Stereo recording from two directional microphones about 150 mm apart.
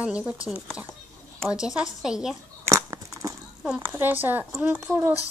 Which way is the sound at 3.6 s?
10° right (ahead or behind).